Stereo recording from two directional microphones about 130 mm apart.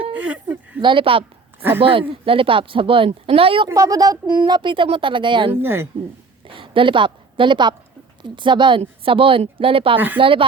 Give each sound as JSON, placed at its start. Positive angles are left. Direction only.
{"t": 0.1, "sound": "a sound", "side_deg": -10}
{"t": 0.8, "sound": "speech", "side_deg": -40}
{"t": 3.7, "sound": "speech", "side_deg": -25}
{"t": 5.6, "sound": "a woman's voice", "side_deg": -20}
{"t": 6.5, "sound": "a woman's voice", "side_deg": -40}